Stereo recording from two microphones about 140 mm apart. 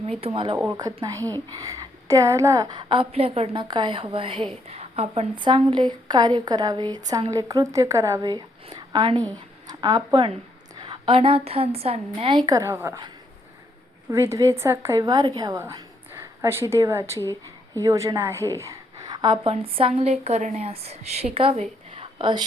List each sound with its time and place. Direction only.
0.2 s a woman's voice: 40° right (ahead or behind)
0.7 s a woman's voice: 25° right (ahead or behind)
14.1 s a woman's voice: 20° right (ahead or behind)
15.6 s a woman's voice: 15° right (ahead or behind); by 22.0 s 45° right (ahead or behind)
22.2 s a woman's voice: 35° right (ahead or behind)